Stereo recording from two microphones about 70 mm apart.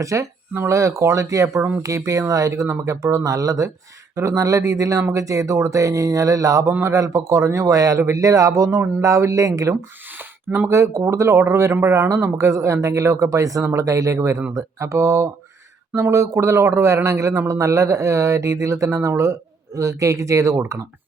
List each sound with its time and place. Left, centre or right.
0.0 s a man's voice: right